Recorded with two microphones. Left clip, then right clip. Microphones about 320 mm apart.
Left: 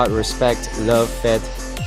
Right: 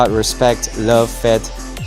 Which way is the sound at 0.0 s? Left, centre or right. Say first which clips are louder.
Right 4 dB; right.